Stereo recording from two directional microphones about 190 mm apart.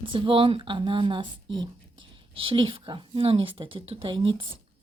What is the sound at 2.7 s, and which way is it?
Speech, 25° right (ahead or behind).